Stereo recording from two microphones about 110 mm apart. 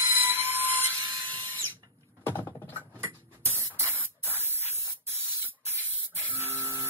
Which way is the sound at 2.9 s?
25° right (ahead or behind).